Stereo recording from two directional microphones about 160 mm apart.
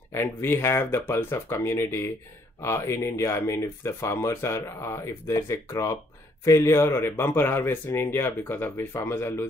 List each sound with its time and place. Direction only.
0.1 s speech: 15° left (ahead or behind)